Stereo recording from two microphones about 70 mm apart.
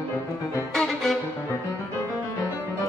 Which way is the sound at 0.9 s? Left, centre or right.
Centre.